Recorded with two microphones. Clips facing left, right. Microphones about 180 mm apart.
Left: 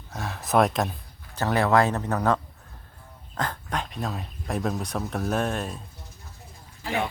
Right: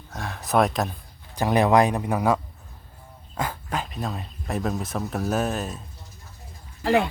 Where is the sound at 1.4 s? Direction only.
15° right (ahead or behind).